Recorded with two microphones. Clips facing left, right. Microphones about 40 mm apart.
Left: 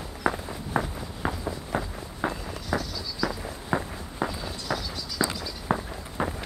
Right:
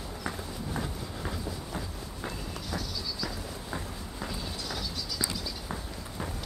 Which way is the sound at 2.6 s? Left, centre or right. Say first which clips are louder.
Left 7 dB; centre.